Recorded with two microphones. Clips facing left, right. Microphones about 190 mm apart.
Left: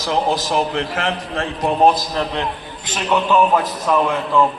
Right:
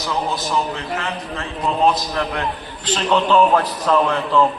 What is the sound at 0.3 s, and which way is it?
Speech, 80° left.